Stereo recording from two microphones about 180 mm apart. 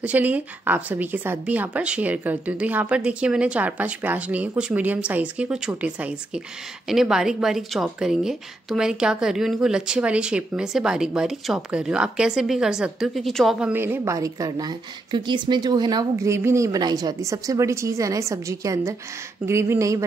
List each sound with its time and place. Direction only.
0.0 s a woman's voice: 10° right (ahead or behind)